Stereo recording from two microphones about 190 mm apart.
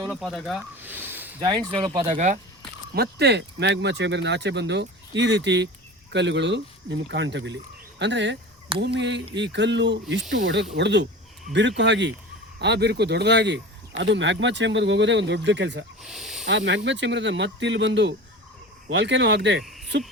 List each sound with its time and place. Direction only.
0.1 s speech: centre (ahead or behind)
0.8 s a sound: 10° right (ahead or behind)
1.5 s speech: 25° right (ahead or behind)
2.0 s speech: 40° right (ahead or behind)
2.9 s speech: 60° right (ahead or behind)
16.0 s snake: centre (ahead or behind)
16.5 s speech: 70° right (ahead or behind)